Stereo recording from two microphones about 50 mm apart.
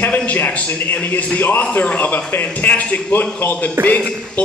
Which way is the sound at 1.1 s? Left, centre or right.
Left.